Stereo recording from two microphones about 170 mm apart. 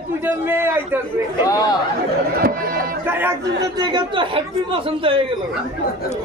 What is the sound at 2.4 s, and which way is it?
Speech, 60° right (ahead or behind).